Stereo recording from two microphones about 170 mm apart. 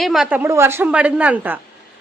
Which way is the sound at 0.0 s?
Centre (ahead or behind).